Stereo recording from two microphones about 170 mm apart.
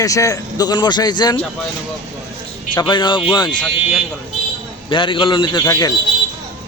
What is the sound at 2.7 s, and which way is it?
Speech, 25° left (ahead or behind).